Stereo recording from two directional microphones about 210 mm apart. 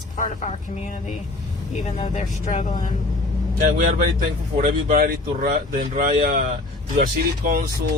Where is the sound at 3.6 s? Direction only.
45° right (ahead or behind).